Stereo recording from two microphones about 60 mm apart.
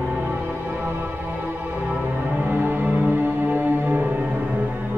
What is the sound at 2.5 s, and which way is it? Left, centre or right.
Music, right.